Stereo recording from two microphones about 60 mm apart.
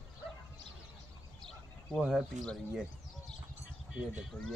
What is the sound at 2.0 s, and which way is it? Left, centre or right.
Speech, centre.